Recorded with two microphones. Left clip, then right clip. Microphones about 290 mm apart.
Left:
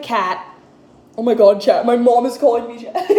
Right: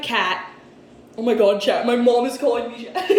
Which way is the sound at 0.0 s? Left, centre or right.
Centre.